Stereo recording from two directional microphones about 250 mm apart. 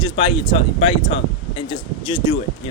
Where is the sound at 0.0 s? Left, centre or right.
Centre.